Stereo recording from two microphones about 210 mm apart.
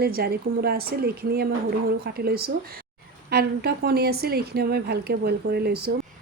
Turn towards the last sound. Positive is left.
turn(degrees=-50)  # may be behind; listen again after turning